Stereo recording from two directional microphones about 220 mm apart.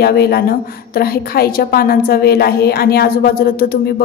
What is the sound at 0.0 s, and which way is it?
A woman's voice, 45° left (ahead or behind).